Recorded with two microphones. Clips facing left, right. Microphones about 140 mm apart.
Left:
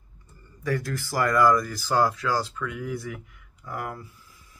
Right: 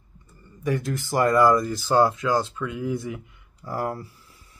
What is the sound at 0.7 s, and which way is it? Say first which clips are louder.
Speech: right 2 dB; 20° right (ahead or behind).